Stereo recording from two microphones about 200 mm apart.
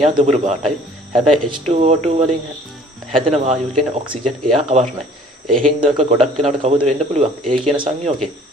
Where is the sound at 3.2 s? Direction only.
30° right (ahead or behind).